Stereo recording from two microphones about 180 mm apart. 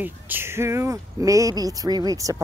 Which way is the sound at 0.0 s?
10° right (ahead or behind).